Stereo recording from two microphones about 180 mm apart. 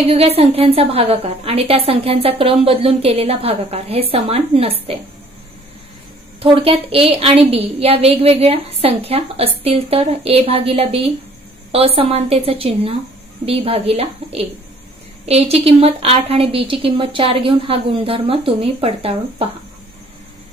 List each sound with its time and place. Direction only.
0.0 s a woman's voice: 35° right (ahead or behind)
6.4 s a woman's voice: 30° right (ahead or behind)